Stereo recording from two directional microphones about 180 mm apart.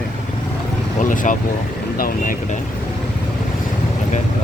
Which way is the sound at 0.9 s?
45° left (ahead or behind).